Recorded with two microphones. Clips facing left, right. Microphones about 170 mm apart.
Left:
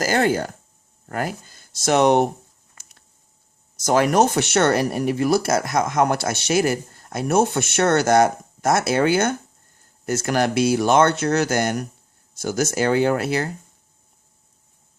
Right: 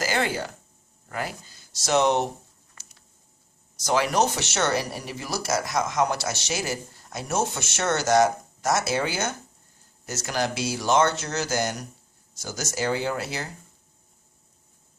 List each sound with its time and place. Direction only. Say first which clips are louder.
0.0 s speech: left 7 dB; 45° left (ahead or behind)
3.8 s speech: left 6 dB; 50° left (ahead or behind)